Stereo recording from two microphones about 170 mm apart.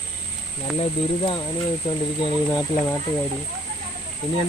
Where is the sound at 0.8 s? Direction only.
30° left (ahead or behind).